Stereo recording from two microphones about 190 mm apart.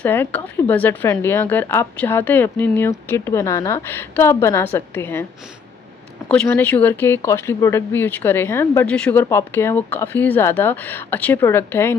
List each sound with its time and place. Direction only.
0.0 s a woman's voice: 10° left (ahead or behind)
6.2 s a woman's voice: 10° left (ahead or behind)